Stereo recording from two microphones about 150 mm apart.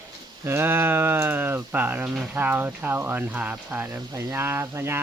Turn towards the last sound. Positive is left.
turn(degrees=-15)  # may be behind; listen again after turning